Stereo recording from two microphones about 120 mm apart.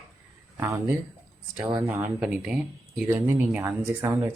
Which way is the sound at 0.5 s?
20° right (ahead or behind).